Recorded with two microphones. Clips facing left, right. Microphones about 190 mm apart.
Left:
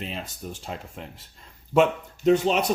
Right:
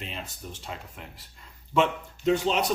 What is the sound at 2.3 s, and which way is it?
Speech, 50° left (ahead or behind).